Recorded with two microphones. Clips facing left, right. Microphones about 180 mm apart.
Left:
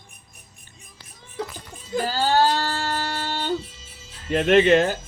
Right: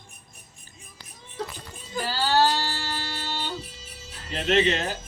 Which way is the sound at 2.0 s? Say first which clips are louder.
Left 2 dB; 50° left (ahead or behind).